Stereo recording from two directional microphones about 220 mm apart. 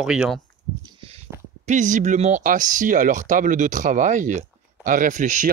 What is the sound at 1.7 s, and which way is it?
Speech, 35° right (ahead or behind).